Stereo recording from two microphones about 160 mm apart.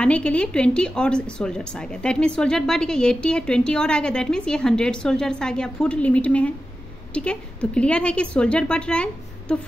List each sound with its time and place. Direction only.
0.0 s a woman's voice: 5° left (ahead or behind)